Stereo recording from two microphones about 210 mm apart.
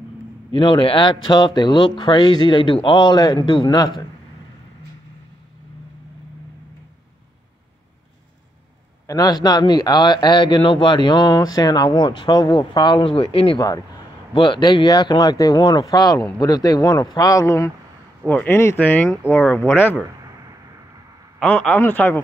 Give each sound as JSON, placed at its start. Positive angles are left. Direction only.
{"t": 0.5, "sound": "speech", "side_deg": 25}
{"t": 9.0, "sound": "speech", "side_deg": 15}
{"t": 21.4, "sound": "speech", "side_deg": 5}